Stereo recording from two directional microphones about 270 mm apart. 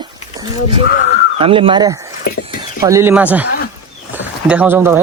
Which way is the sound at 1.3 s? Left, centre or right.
Centre.